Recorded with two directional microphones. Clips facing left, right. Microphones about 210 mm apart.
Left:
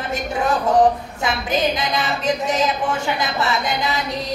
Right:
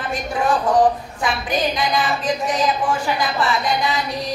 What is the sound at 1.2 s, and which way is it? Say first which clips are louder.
A woman's voice: left 1 dB; 25° left (ahead or behind).